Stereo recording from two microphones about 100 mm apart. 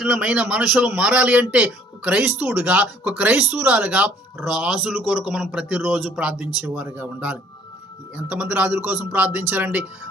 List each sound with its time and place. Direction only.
0.2 s speech: 10° right (ahead or behind)
2.6 s a man's voice: 10° right (ahead or behind)